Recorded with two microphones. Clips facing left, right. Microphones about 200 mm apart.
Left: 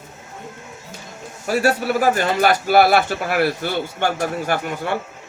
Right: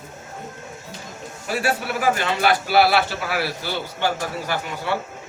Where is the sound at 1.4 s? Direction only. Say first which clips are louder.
Left 6 dB; 40° left (ahead or behind).